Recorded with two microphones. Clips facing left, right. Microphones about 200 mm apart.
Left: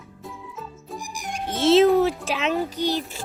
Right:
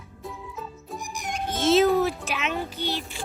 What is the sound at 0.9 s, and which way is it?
Music, 10° left (ahead or behind).